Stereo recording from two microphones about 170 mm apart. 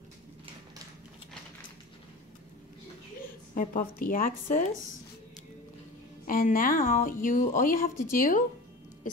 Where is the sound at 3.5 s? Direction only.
55° left (ahead or behind).